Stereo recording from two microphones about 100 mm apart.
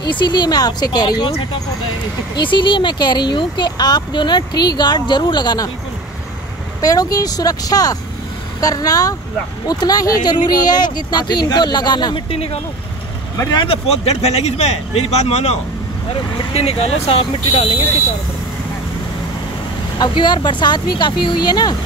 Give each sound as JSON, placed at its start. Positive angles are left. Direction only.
{"t": 0.0, "sound": "speech", "side_deg": 50}
{"t": 2.3, "sound": "speech", "side_deg": 55}
{"t": 6.8, "sound": "speech", "side_deg": 35}
{"t": 12.3, "sound": "speech", "side_deg": 80}
{"t": 13.7, "sound": "speech", "side_deg": 90}
{"t": 20.0, "sound": "speech", "side_deg": 50}